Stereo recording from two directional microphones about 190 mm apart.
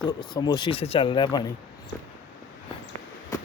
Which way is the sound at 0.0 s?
20° left (ahead or behind).